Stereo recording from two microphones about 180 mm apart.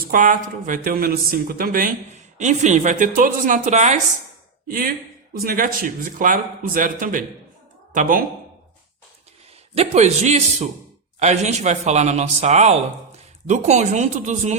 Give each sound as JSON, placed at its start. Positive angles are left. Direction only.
{"t": 0.1, "sound": "a man's voice", "side_deg": -50}
{"t": 4.7, "sound": "a man's voice", "side_deg": -55}
{"t": 9.7, "sound": "a man's voice", "side_deg": -40}